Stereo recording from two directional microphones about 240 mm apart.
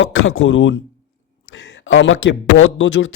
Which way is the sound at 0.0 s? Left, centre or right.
Left.